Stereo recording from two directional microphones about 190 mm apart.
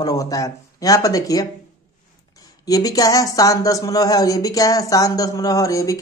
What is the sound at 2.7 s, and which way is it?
Speech, 20° left (ahead or behind).